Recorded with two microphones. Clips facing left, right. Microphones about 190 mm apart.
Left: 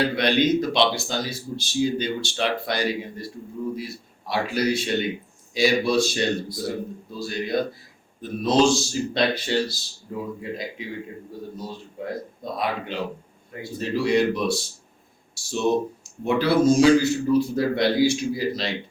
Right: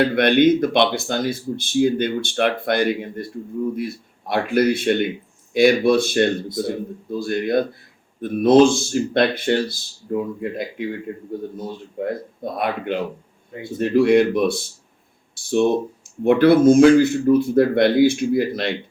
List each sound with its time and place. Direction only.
0.0 s speech: 55° right (ahead or behind)